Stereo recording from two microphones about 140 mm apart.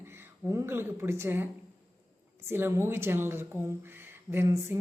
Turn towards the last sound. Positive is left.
turn(degrees=-15)  # may be behind; listen again after turning